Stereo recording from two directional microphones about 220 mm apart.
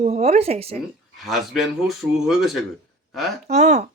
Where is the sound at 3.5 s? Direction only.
30° right (ahead or behind).